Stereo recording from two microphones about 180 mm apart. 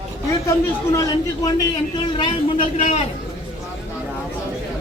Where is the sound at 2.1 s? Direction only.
30° left (ahead or behind).